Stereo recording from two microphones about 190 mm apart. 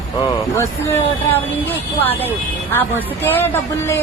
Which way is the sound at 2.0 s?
10° left (ahead or behind).